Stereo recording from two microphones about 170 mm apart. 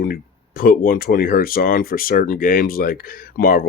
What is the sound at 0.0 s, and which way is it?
Speech, 60° left (ahead or behind).